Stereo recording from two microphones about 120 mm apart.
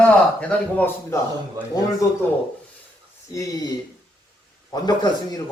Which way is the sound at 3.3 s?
30° left (ahead or behind).